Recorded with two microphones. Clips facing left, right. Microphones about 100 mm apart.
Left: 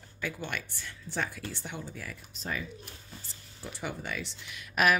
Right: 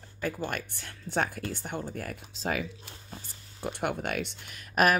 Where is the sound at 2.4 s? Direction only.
90° right.